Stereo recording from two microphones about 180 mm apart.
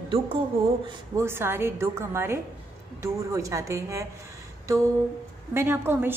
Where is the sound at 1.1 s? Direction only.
15° right (ahead or behind).